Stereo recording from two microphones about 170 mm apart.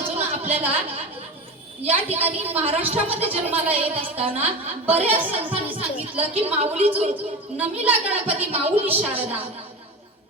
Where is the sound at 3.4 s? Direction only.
10° right (ahead or behind).